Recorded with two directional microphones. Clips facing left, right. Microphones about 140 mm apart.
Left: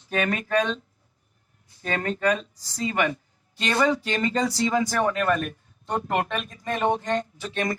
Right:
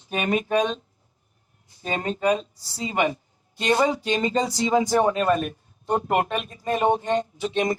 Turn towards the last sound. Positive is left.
turn(degrees=-20)  # may be behind; listen again after turning